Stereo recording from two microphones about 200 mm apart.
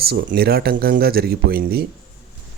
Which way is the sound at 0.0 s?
50° right (ahead or behind).